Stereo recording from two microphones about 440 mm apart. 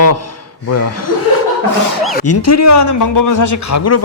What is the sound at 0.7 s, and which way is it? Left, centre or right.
Speech, left.